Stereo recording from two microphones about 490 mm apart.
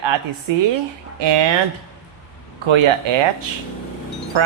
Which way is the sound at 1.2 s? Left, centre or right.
Right.